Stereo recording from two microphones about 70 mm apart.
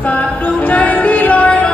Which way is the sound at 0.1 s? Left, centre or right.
Left.